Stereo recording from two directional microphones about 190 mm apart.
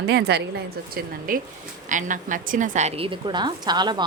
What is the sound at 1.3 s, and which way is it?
A woman's voice, 45° right (ahead or behind).